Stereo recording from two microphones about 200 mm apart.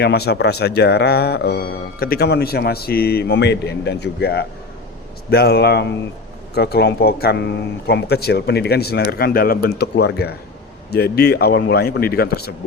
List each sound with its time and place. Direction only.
0.0 s speech: 55° left (ahead or behind)